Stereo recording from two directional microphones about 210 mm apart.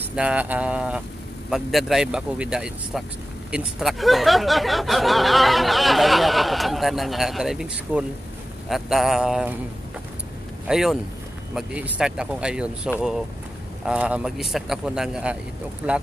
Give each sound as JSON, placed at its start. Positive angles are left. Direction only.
{"t": 0.1, "sound": "speech", "side_deg": -5}
{"t": 10.7, "sound": "speech", "side_deg": 0}